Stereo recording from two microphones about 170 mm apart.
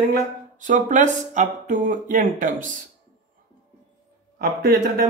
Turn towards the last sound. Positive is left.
turn(degrees=-60)  # may be behind; listen again after turning